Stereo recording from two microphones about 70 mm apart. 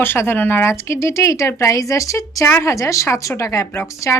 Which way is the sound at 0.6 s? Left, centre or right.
Left.